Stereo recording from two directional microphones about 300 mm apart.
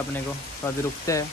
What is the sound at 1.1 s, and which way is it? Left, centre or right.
Speech, centre.